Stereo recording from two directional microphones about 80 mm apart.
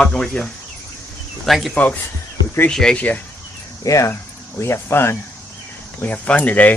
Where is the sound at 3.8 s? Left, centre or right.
Left.